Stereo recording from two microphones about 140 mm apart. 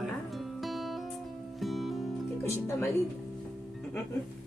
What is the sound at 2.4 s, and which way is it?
Speech, 20° left (ahead or behind).